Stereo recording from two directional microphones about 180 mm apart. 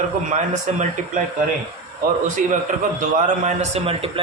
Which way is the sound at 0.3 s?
40° right (ahead or behind).